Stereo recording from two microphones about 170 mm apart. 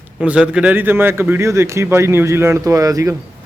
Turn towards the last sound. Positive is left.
turn(degrees=-20)  # may be behind; listen again after turning